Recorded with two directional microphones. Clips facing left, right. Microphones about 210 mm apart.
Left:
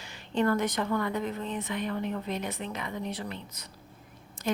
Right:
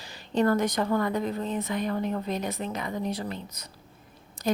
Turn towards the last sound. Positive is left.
turn(degrees=-40)  # may be behind; listen again after turning